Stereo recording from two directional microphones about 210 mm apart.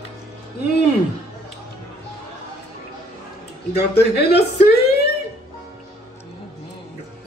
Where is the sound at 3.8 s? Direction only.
50° left (ahead or behind).